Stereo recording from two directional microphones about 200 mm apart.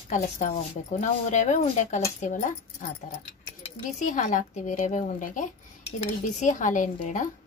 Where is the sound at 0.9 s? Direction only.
35° left (ahead or behind).